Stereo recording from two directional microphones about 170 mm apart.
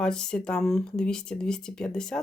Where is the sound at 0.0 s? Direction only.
5° left (ahead or behind).